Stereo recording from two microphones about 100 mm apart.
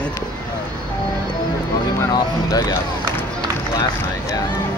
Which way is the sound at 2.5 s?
40° left (ahead or behind).